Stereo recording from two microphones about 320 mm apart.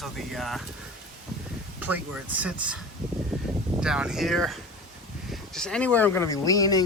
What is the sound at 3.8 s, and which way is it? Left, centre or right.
Speech, centre.